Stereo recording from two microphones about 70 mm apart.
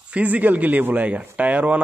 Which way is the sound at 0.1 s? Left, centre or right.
Right.